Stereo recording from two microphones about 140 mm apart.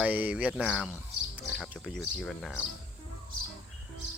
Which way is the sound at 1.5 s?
Centre (ahead or behind).